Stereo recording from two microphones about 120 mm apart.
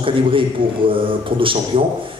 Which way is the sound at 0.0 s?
45° right (ahead or behind).